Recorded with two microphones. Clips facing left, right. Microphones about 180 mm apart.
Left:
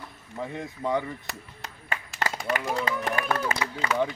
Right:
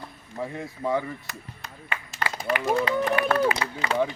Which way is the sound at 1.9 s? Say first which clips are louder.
Left 1 dB; 45° left (ahead or behind).